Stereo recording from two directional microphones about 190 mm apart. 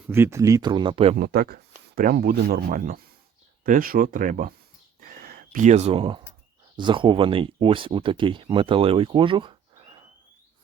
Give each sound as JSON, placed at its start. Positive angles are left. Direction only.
{"t": 0.1, "sound": "speech", "side_deg": -15}
{"t": 1.2, "sound": "speech", "side_deg": -55}
{"t": 4.9, "sound": "a sound", "side_deg": -45}
{"t": 6.7, "sound": "speech", "side_deg": -25}